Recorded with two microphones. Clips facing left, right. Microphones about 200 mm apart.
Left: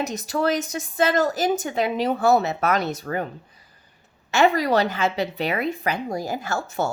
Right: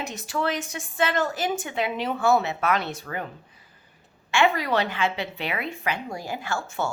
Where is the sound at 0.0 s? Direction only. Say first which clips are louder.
Left 5 dB; 40° left (ahead or behind).